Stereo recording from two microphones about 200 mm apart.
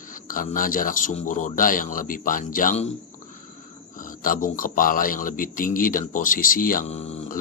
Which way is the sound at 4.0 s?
40° left (ahead or behind).